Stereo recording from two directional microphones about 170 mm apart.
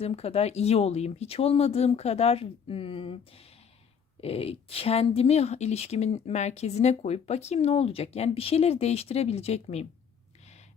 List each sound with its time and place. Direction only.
0.0 s speech: 35° left (ahead or behind)